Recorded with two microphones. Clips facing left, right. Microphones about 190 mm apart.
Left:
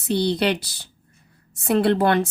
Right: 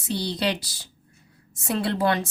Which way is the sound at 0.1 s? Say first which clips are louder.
Left 6 dB; 60° left (ahead or behind).